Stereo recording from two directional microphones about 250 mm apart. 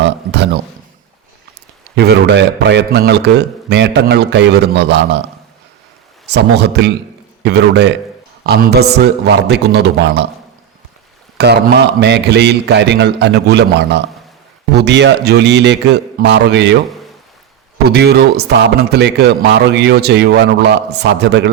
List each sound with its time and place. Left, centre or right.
0.0 s a sound: right
2.0 s a man's voice: right
6.2 s a man's voice: right
11.3 s a man's voice: right
17.8 s a man's voice: right